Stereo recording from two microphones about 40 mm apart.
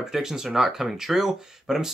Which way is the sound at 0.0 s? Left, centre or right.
Centre.